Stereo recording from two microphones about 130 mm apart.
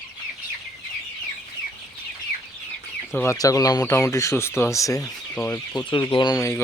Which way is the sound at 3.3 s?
30° left (ahead or behind).